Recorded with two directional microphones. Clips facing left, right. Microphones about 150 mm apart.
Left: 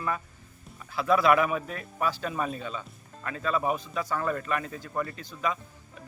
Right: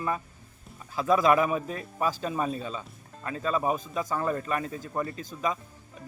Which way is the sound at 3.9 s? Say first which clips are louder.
Right 1 dB; 20° right (ahead or behind).